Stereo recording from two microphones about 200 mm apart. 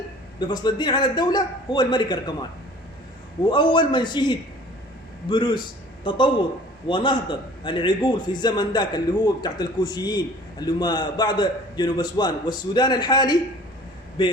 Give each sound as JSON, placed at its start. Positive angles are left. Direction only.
{"t": 0.3, "sound": "a man's voice", "side_deg": 20}
{"t": 3.5, "sound": "a man's voice", "side_deg": 25}